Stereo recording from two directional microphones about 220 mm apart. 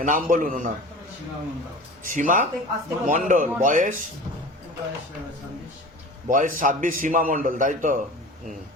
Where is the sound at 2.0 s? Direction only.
35° right (ahead or behind).